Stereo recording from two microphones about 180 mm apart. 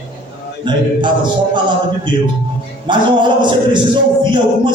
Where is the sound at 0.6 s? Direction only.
25° right (ahead or behind).